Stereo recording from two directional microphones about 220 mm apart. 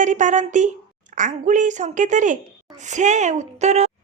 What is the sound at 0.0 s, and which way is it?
A woman's voice, 35° right (ahead or behind).